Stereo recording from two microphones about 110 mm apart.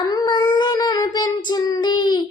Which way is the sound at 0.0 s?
35° left (ahead or behind).